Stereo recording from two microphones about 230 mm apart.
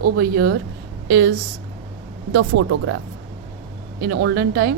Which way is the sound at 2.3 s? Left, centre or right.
Right.